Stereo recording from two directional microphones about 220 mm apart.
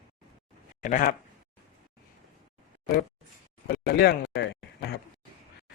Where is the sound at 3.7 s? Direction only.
45° left (ahead or behind).